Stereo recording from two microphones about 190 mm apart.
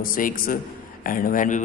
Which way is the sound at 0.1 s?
45° left (ahead or behind).